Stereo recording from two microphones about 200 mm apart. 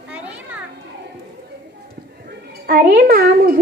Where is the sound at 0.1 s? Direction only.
5° right (ahead or behind).